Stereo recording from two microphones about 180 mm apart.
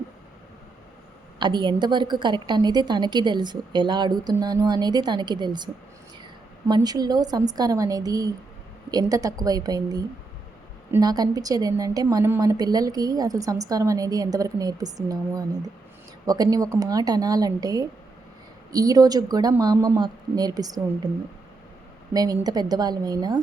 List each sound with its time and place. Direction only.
1.4 s a woman's voice: 25° right (ahead or behind)
22.1 s a woman's voice: 20° right (ahead or behind)